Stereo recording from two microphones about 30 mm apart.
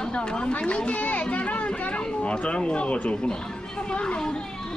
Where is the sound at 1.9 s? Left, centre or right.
Left.